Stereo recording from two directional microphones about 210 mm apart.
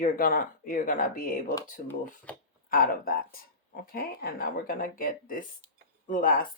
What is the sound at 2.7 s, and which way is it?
Speech, 45° left (ahead or behind).